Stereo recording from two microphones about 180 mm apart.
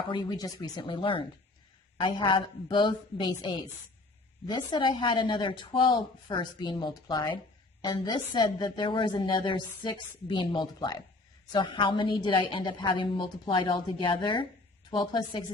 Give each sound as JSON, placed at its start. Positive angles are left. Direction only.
{"t": 0.1, "sound": "a woman's voice", "side_deg": 25}